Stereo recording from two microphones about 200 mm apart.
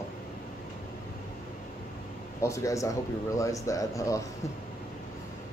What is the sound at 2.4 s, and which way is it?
Speech, 15° left (ahead or behind).